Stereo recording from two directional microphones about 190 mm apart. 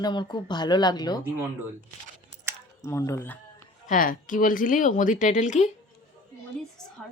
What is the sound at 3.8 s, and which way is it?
Speech, 45° left (ahead or behind).